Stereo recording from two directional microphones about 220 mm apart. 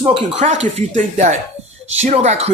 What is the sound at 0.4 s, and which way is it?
Speech, 30° right (ahead or behind).